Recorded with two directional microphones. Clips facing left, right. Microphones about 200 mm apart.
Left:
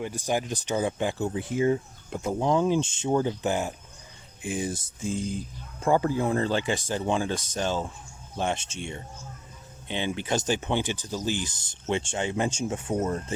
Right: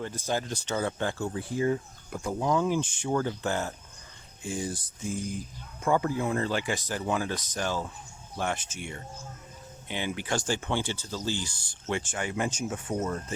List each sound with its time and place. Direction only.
0.0 s speech: 15° left (ahead or behind); by 13.2 s 30° left (ahead or behind)